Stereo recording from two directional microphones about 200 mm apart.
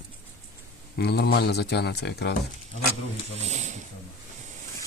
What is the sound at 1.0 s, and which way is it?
Speech, 55° left (ahead or behind).